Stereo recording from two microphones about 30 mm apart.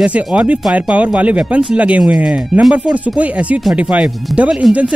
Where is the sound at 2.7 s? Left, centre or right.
Right.